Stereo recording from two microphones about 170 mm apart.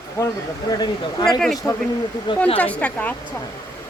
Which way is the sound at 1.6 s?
15° left (ahead or behind).